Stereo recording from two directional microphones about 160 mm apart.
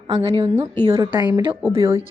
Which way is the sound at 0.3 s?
35° right (ahead or behind).